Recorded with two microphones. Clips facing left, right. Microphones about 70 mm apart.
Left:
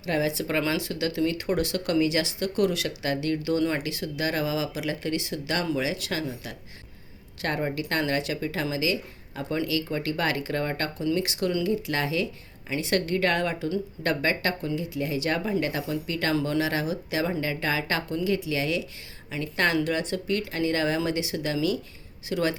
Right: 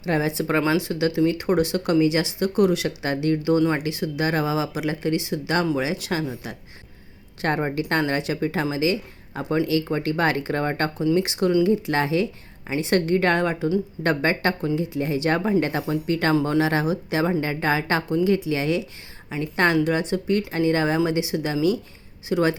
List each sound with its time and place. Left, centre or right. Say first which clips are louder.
0.0 s speech: right 3 dB; right
3.6 s speech: right 5 dB; centre
3.8 s speech: right 5 dB; right